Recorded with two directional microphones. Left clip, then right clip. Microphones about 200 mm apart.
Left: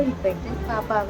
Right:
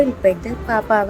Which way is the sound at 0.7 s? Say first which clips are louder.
Right 7 dB; 20° right (ahead or behind).